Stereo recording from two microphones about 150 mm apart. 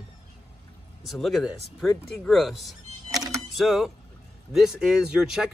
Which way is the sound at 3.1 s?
25° right (ahead or behind).